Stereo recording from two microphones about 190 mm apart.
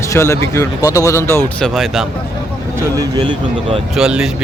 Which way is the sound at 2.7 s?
15° right (ahead or behind).